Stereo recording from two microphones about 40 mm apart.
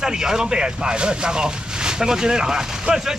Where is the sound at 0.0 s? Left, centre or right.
Centre.